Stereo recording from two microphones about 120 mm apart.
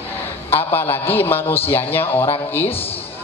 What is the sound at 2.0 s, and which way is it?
Speech, 50° left (ahead or behind).